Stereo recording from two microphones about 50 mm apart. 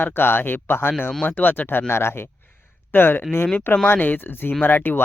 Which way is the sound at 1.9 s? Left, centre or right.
Left.